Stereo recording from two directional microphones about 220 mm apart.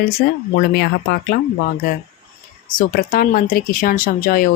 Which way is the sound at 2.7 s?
40° left (ahead or behind).